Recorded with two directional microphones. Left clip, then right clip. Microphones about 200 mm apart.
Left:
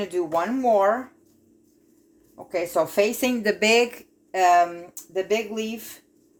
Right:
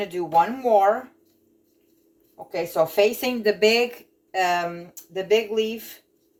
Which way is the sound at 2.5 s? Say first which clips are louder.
Right 1 dB; 45° left (ahead or behind).